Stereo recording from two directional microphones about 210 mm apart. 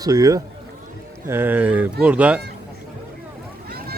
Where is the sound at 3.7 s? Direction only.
45° right (ahead or behind).